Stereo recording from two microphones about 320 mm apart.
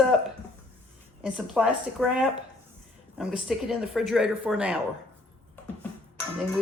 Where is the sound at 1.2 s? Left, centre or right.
Centre.